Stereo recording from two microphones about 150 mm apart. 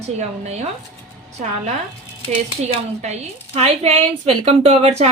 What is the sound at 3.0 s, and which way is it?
A woman's voice, 45° right (ahead or behind).